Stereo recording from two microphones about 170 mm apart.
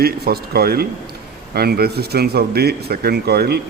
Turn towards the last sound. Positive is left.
turn(degrees=-70)  # may be behind; listen again after turning